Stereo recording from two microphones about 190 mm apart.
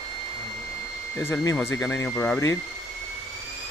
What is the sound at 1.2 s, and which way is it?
A man's voice, 10° left (ahead or behind).